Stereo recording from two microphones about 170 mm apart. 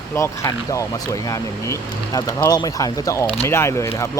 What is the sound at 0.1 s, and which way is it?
Speech, 15° left (ahead or behind).